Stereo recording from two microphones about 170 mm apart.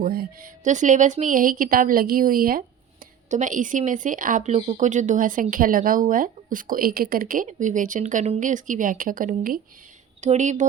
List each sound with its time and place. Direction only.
0.0 s a woman's voice: 60° right (ahead or behind)
10.2 s speech: 45° right (ahead or behind)